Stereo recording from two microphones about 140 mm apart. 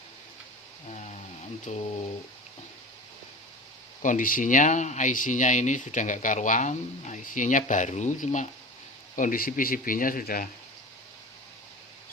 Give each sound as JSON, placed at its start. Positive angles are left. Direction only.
{"t": 0.9, "sound": "a sound", "side_deg": 55}
{"t": 1.7, "sound": "speech", "side_deg": 55}
{"t": 4.0, "sound": "speech", "side_deg": 70}
{"t": 9.1, "sound": "speech", "side_deg": 80}